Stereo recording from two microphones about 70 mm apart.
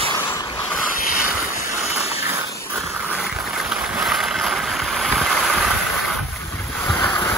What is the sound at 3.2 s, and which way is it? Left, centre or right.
Boat, centre.